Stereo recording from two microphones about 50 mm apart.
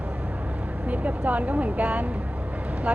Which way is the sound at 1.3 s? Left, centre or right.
Right.